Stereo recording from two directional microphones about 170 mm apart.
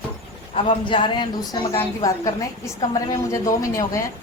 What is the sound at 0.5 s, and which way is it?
A woman's voice, 30° left (ahead or behind).